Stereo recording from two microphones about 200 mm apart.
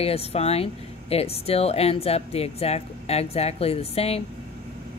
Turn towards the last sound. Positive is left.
turn(degrees=30)  # may be behind; listen again after turning